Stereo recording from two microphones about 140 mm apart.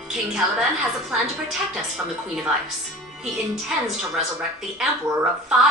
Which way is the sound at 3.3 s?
5° right (ahead or behind).